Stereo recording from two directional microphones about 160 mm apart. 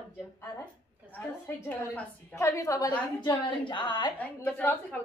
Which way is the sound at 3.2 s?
30° left (ahead or behind).